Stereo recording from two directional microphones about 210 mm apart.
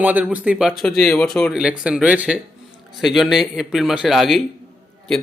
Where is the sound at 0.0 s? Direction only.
5° right (ahead or behind).